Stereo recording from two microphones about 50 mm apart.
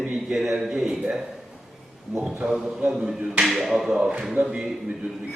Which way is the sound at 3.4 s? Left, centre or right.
Centre.